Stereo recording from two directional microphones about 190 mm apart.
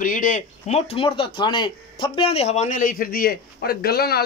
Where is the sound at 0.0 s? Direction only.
45° left (ahead or behind).